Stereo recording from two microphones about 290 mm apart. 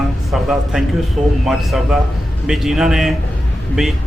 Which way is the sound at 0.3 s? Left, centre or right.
Centre.